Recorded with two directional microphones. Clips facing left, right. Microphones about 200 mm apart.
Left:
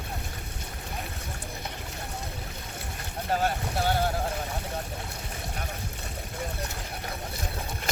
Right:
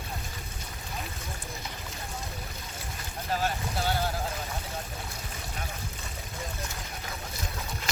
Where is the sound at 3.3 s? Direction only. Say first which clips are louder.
Left 3 dB; 50° left (ahead or behind).